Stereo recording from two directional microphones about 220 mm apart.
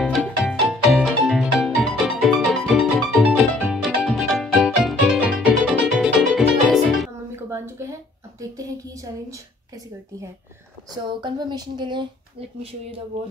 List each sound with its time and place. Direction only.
0.0 s music: centre (ahead or behind)
7.3 s a sound: 10° right (ahead or behind)
11.2 s speech: 20° right (ahead or behind)